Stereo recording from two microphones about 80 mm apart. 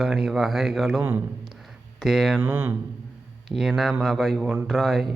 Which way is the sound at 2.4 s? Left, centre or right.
Right.